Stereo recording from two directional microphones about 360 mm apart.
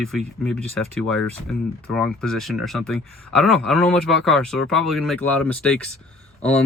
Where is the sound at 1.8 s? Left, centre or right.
Centre.